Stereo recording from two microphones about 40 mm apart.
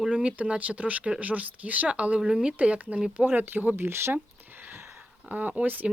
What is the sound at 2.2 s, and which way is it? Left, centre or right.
Speech, centre.